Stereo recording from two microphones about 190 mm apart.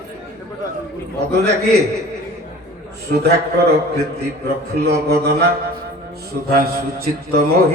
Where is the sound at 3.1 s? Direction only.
60° right (ahead or behind).